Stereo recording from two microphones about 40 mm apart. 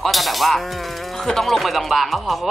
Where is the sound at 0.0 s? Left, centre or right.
Centre.